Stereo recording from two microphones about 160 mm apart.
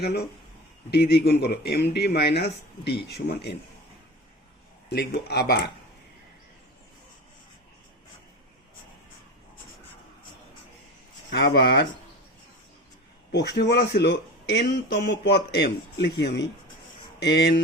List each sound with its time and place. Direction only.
0.0 s speech: 90° left
4.9 s speech: 90° left
11.3 s speech: 90° left
13.3 s speech: 90° left